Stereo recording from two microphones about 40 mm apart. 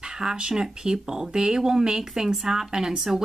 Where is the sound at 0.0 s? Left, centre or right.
Centre.